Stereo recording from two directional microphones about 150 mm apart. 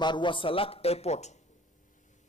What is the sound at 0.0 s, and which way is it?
A man's voice, 30° left (ahead or behind).